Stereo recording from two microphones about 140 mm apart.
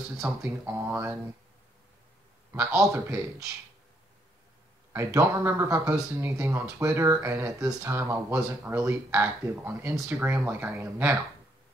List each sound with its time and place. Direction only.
0.2 s speech: 20° right (ahead or behind)
2.9 s speech: 20° right (ahead or behind)
4.9 s speech: 20° right (ahead or behind)